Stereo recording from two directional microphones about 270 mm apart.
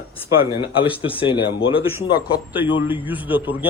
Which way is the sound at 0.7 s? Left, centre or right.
Centre.